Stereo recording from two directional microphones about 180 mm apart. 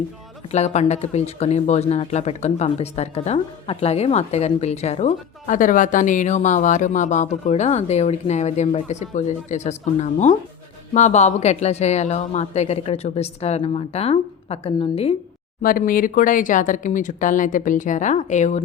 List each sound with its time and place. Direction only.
0.5 s speech: 40° left (ahead or behind)
15.6 s speech: 50° left (ahead or behind)